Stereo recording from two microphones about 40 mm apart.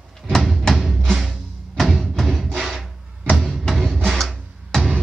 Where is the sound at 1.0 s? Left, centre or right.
Centre.